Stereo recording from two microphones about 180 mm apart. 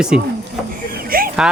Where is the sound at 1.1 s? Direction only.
55° right (ahead or behind).